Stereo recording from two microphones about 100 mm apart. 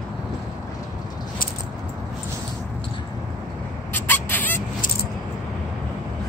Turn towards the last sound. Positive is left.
turn(degrees=20)  # may be behind; listen again after turning